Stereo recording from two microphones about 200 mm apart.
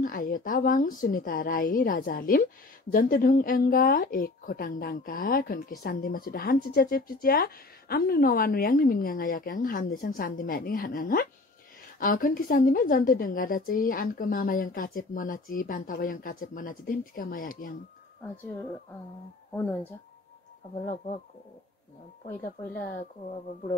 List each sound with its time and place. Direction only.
0.0 s a woman's voice: 45° left (ahead or behind)
19.5 s speech: 10° left (ahead or behind)
20.8 s speech: 40° left (ahead or behind)